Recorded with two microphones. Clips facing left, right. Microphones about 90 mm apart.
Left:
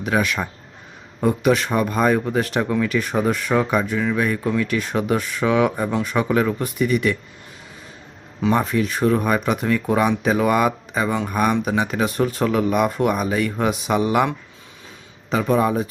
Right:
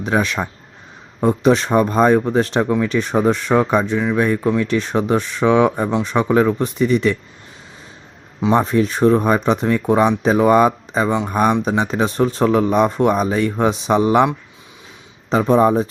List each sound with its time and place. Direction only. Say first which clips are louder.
0.0 s speech: right 2 dB; 25° right (ahead or behind)
8.4 s speech: right 4 dB; 25° right (ahead or behind)
15.3 s speech: right 5 dB; 30° right (ahead or behind)